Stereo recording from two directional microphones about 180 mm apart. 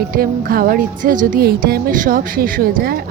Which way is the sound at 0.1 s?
55° right (ahead or behind).